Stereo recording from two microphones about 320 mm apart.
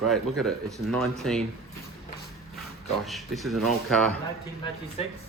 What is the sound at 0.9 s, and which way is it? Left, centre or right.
Speech, centre.